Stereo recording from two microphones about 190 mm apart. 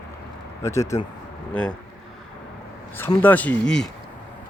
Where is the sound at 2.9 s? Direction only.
10° left (ahead or behind).